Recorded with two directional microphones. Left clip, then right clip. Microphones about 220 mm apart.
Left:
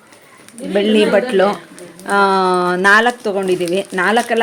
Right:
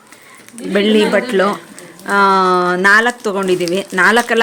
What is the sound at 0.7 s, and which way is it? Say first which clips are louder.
Speech: even; 10° right (ahead or behind).